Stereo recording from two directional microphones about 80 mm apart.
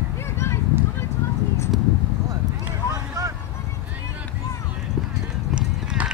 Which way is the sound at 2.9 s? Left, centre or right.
Right.